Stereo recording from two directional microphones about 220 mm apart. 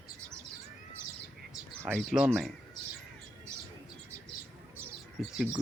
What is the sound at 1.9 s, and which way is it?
Speech, 5° right (ahead or behind).